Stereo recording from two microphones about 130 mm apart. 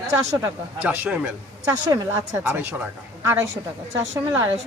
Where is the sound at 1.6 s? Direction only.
25° right (ahead or behind).